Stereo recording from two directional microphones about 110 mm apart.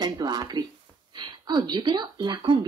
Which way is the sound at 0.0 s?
40° right (ahead or behind).